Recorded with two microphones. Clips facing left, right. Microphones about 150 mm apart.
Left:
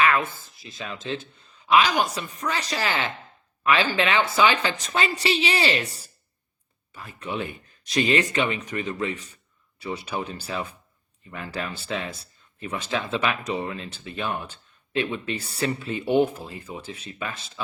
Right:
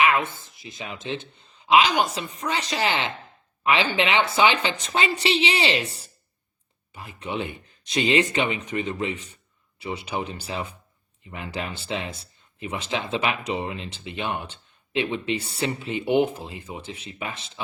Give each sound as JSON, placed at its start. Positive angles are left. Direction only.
{"t": 0.0, "sound": "a man's voice", "side_deg": -20}
{"t": 6.9, "sound": "speech", "side_deg": -20}